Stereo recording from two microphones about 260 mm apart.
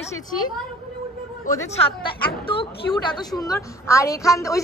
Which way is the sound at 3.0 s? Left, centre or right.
Centre.